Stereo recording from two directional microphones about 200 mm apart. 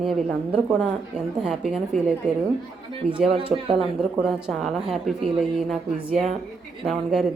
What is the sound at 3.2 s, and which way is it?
Speech, 25° right (ahead or behind).